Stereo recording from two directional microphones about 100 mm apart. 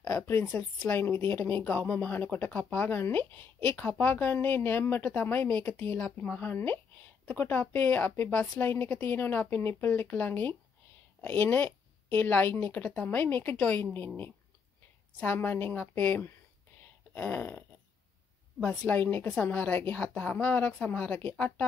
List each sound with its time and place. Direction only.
0.0 s a woman's voice: 25° left (ahead or behind)